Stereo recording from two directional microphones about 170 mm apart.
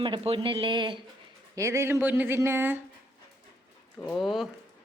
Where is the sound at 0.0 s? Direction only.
30° right (ahead or behind).